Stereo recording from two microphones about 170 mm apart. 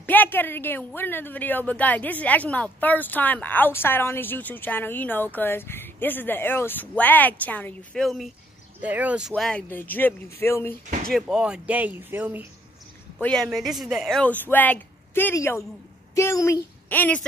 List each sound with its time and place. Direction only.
0.0 s speech: 10° left (ahead or behind); by 9.3 s 5° right (ahead or behind)
9.3 s speech: 5° left (ahead or behind)
11.1 s speech: centre (ahead or behind)
13.2 s speech: 5° left (ahead or behind)